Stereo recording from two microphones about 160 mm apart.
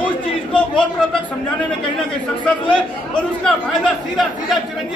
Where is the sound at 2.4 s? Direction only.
5° left (ahead or behind).